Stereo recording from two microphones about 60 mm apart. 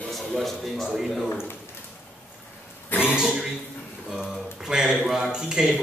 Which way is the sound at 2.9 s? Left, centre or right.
Left.